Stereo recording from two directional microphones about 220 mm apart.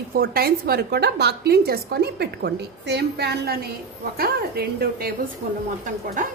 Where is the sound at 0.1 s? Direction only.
45° right (ahead or behind).